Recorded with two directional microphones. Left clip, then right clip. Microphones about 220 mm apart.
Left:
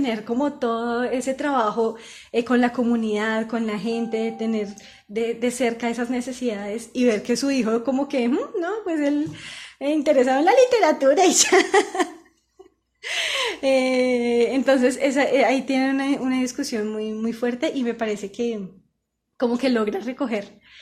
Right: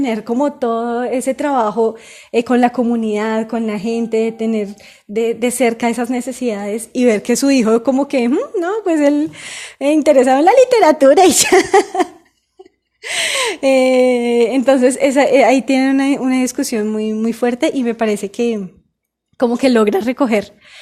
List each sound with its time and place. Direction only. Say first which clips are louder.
0.0 s a woman's voice: right 7 dB; 35° right (ahead or behind)
3.1 s a woman's voice: right 6 dB; 30° right (ahead or behind)